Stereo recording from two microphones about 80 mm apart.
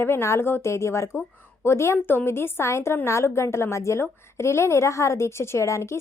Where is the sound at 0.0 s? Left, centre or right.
Left.